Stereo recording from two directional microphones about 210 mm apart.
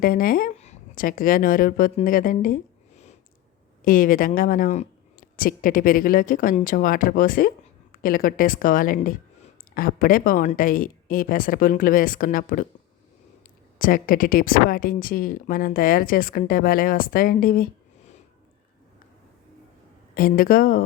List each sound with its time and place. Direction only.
0.0 s a woman's voice: 45° left (ahead or behind)
13.7 s speech: 40° left (ahead or behind)
20.1 s speech: 45° left (ahead or behind)